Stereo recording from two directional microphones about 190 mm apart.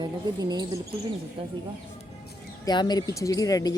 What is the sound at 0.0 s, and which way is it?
Speech, 20° right (ahead or behind).